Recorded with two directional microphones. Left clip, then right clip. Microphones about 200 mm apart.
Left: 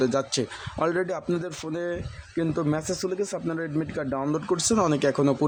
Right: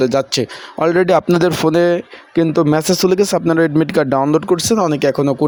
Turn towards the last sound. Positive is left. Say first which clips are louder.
# right 8 dB
turn(degrees=-25)  # may be behind; listen again after turning